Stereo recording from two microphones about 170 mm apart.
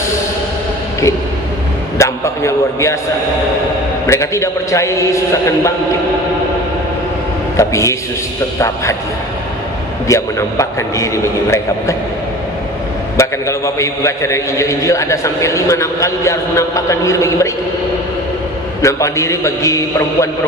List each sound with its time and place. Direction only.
2.0 s a man's voice: 15° left (ahead or behind)
4.1 s a man's voice: 15° left (ahead or behind)
7.5 s a man's voice: 20° left (ahead or behind)
10.0 s a man's voice: 20° left (ahead or behind)
13.2 s a man's voice: 15° left (ahead or behind)
18.8 s a man's voice: 20° left (ahead or behind)